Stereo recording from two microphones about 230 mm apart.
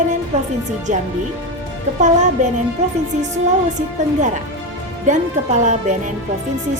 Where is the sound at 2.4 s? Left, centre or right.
Right.